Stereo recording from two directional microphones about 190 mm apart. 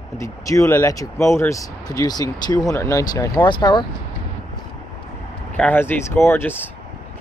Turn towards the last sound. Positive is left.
turn(degrees=10)  # may be behind; listen again after turning